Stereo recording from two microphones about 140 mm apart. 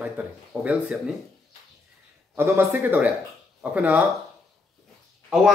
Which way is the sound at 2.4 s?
15° right (ahead or behind).